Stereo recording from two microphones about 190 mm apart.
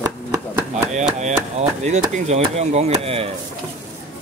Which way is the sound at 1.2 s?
35° right (ahead or behind).